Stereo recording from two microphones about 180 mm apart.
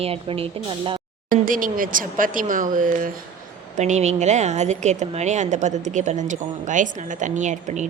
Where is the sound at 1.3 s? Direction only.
50° right (ahead or behind).